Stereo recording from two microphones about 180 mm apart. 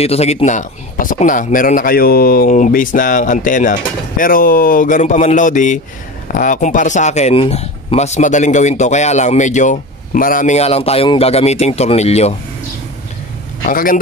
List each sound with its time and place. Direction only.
0.0 s a man's voice: 35° left (ahead or behind)
13.7 s a man's voice: 50° left (ahead or behind)